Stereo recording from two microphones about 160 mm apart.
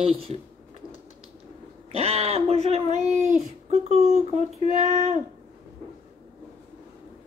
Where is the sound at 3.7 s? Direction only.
40° right (ahead or behind).